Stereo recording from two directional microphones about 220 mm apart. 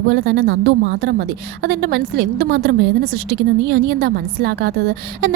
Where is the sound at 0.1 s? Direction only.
50° right (ahead or behind).